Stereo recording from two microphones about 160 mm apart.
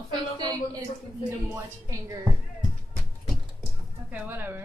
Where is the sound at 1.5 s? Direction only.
20° right (ahead or behind).